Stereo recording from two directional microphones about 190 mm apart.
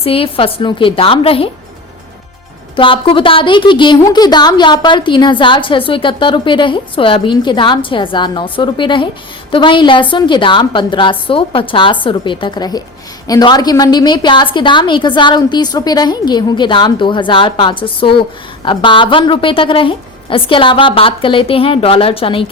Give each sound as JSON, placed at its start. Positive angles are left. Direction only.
{"t": 0.0, "sound": "a woman's voice", "side_deg": 30}
{"t": 2.7, "sound": "a woman's voice", "side_deg": 25}